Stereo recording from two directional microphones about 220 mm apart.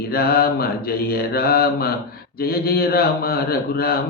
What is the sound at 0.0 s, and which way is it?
A man's voice, 45° left (ahead or behind).